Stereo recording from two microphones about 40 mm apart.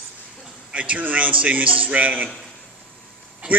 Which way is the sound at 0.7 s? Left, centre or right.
Right.